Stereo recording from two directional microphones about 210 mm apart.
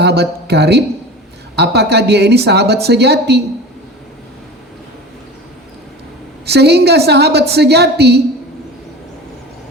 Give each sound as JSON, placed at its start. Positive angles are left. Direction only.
{"t": 0.0, "sound": "a woman's voice", "side_deg": -50}
{"t": 6.4, "sound": "a woman's voice", "side_deg": -50}